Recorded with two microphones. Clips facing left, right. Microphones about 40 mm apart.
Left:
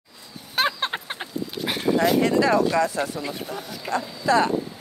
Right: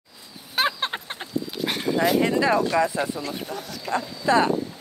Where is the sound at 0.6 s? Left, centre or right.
Centre.